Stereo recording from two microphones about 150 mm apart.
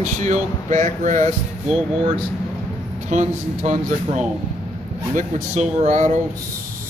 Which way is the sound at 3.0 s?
50° right (ahead or behind).